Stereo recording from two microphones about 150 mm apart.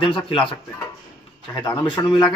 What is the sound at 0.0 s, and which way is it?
Speech, 35° left (ahead or behind).